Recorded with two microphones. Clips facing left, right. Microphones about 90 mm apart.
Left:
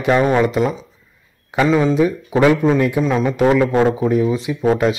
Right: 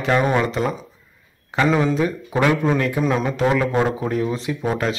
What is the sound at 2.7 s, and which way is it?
Speech, 20° left (ahead or behind).